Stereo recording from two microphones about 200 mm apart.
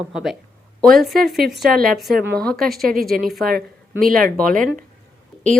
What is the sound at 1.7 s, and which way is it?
Speech, 45° right (ahead or behind).